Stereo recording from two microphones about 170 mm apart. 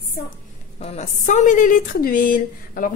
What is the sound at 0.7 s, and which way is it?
A woman's voice, 40° left (ahead or behind).